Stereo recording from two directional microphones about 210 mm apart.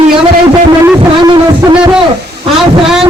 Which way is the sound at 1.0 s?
20° right (ahead or behind).